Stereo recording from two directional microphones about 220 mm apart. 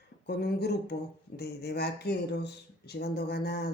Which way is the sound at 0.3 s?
45° left (ahead or behind).